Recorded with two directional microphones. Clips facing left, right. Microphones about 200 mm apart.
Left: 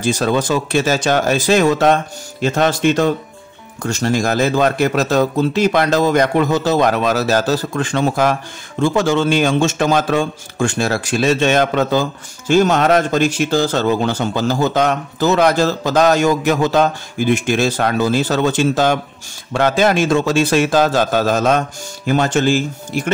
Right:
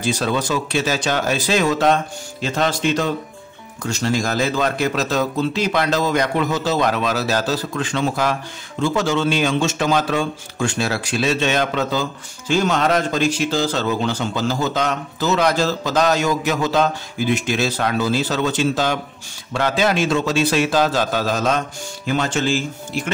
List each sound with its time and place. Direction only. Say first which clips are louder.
0.0 s speech: left 4 dB; 50° left (ahead or behind)